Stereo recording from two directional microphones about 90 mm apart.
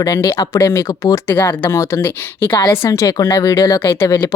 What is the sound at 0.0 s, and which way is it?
Speech, 40° left (ahead or behind).